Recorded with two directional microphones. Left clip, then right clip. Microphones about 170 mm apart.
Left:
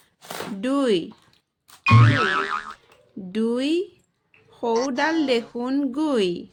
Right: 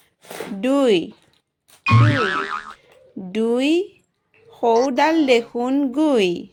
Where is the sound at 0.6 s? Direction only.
20° right (ahead or behind).